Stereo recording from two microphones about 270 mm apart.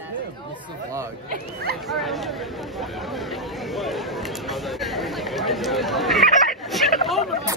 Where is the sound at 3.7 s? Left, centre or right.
Centre.